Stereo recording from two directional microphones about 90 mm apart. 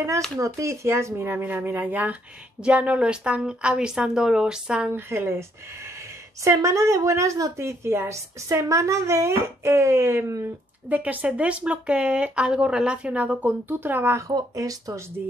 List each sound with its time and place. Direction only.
0.4 s speech: 35° right (ahead or behind); by 4.9 s 10° right (ahead or behind)
4.9 s speech: 25° right (ahead or behind)
6.4 s a woman's voice: 35° right (ahead or behind)
10.9 s speech: 15° right (ahead or behind)
14.2 s a woman's voice: 40° right (ahead or behind)